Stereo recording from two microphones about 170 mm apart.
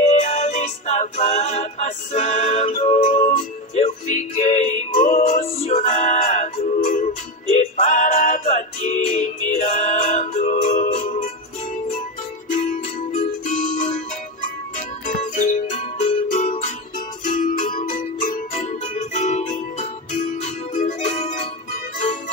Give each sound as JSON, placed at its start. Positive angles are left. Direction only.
{"t": 0.0, "sound": "music", "side_deg": 40}
{"t": 5.4, "sound": "music", "side_deg": 40}
{"t": 12.4, "sound": "music", "side_deg": 50}
{"t": 15.0, "sound": "music", "side_deg": 50}